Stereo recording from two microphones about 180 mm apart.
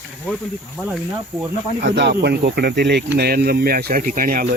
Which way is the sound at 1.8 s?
70° right (ahead or behind).